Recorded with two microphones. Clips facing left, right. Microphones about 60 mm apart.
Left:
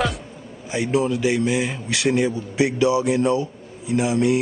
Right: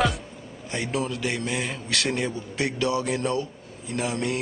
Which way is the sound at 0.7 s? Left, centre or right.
Centre.